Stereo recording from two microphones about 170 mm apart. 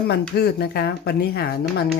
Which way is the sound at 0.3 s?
70° left (ahead or behind).